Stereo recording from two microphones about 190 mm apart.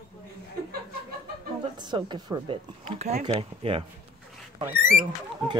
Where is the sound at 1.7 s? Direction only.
25° right (ahead or behind).